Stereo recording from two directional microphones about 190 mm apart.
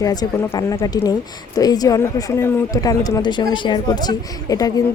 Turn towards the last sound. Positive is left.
turn(degrees=20)  # may be behind; listen again after turning